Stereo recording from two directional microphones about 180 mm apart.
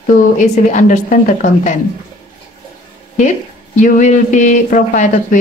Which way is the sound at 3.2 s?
45° left (ahead or behind).